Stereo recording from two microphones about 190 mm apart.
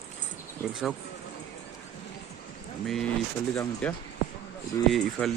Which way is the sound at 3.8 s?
5° left (ahead or behind).